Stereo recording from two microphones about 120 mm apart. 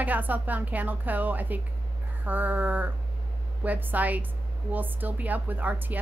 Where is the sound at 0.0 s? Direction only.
15° right (ahead or behind).